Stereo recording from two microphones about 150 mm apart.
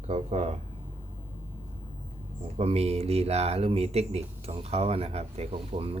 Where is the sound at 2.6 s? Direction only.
45° right (ahead or behind).